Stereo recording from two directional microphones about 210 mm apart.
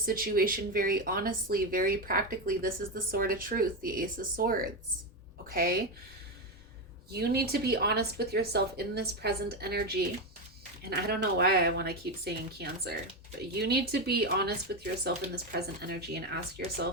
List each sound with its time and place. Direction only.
0.0 s speech: 45° right (ahead or behind)
7.1 s speech: 50° right (ahead or behind)
15.5 s speech: 50° right (ahead or behind)